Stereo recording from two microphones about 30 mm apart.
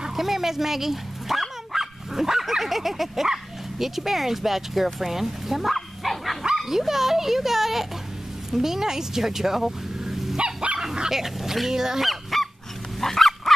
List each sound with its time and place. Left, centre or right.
0.1 s dog: centre
3.7 s speech: centre
5.8 s bow-wow: centre
6.5 s dog: centre
6.9 s speech: centre
9.9 s dog: centre
10.3 s dog: right
11.1 s speech: centre
12.0 s goose: centre
13.0 s dog: centre